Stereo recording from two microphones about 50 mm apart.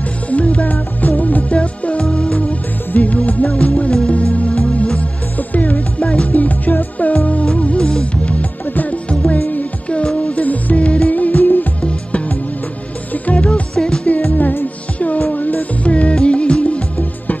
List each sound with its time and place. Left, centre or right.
0.3 s music: left
2.9 s music: left
5.9 s music: centre
6.2 s music: left
7.6 s music: left
8.6 s music: left
13.1 s music: left
13.7 s music: centre
14.0 s music: left